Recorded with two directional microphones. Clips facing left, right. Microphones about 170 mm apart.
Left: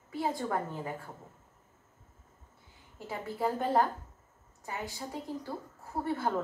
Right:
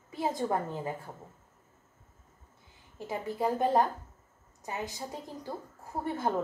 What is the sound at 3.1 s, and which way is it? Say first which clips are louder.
A woman's voice: right 2 dB; 20° right (ahead or behind).